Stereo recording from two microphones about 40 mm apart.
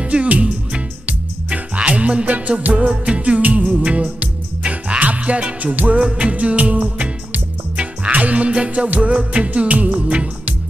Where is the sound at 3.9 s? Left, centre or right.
Right.